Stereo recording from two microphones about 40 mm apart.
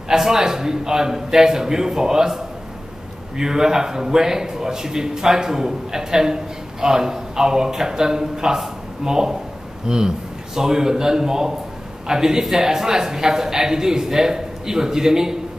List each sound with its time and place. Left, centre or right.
0.1 s a man's voice: centre